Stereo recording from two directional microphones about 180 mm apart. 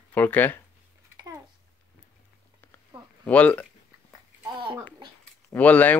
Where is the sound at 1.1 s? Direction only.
15° right (ahead or behind).